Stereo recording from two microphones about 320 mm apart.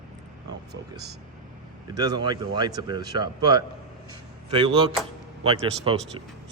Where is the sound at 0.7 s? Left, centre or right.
Right.